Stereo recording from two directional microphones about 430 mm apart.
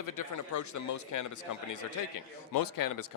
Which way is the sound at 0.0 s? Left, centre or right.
Left.